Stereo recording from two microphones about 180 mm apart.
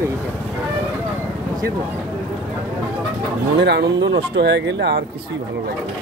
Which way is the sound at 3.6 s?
65° right (ahead or behind).